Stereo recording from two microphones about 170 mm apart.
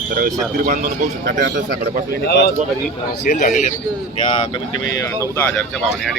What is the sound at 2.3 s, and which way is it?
Speech, 80° left.